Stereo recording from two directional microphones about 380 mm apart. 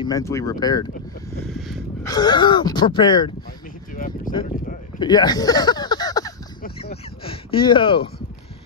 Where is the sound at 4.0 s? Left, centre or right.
Left.